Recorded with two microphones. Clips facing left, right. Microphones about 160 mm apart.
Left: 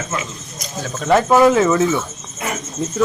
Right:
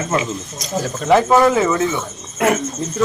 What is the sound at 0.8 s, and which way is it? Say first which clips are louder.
Speech: right 1 dB; centre (ahead or behind).